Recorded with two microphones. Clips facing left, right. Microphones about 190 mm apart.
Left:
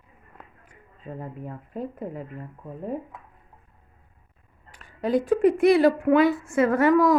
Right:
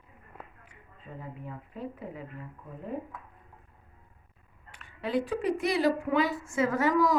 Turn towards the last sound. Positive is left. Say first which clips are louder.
# left 7 dB
turn(degrees=55)  # may be behind; listen again after turning